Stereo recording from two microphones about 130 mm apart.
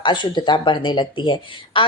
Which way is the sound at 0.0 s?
35° left (ahead or behind).